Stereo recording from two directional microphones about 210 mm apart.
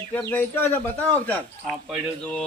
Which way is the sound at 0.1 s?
10° left (ahead or behind).